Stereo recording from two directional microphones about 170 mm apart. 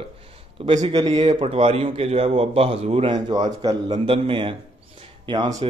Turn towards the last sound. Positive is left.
turn(degrees=-25)  # may be behind; listen again after turning